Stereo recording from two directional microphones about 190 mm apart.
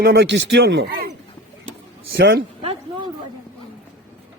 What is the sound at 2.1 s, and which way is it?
Speech, 65° right (ahead or behind).